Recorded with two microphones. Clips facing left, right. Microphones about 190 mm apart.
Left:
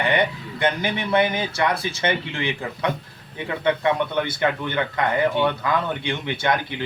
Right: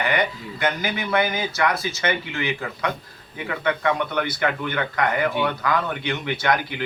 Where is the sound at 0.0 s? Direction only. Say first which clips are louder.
Left 2 dB; 30° left (ahead or behind).